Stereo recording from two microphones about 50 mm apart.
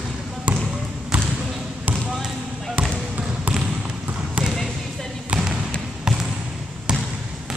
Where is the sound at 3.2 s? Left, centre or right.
Right.